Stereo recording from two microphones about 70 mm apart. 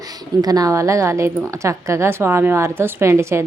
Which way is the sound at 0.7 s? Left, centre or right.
Right.